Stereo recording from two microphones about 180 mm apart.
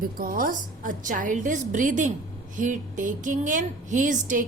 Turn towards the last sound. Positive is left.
turn(degrees=-45)  # may be behind; listen again after turning